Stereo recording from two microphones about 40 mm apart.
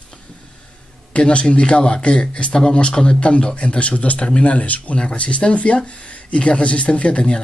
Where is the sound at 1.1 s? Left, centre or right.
Left.